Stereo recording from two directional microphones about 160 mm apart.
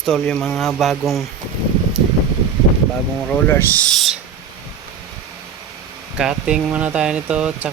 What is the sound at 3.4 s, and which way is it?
Speech, 15° left (ahead or behind).